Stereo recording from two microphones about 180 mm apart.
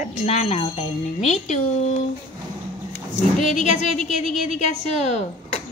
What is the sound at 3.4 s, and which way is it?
A woman's voice, 40° left (ahead or behind).